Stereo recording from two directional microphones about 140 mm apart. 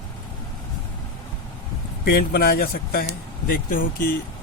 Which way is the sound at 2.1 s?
90° left.